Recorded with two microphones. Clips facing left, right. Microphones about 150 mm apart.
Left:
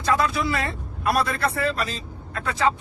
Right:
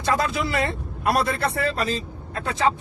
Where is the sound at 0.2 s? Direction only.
25° right (ahead or behind).